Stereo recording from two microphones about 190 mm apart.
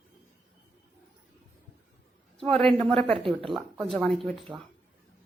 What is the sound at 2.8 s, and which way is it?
Speech, 5° left (ahead or behind).